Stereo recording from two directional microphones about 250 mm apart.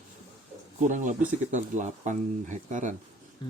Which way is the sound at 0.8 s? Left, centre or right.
Right.